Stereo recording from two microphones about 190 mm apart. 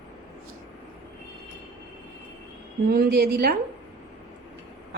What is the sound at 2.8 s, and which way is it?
Speech, 60° right (ahead or behind).